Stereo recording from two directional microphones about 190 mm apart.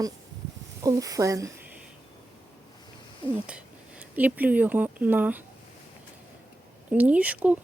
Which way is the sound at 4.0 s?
10° right (ahead or behind).